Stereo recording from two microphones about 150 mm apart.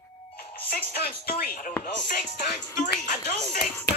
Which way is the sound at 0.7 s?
85° left.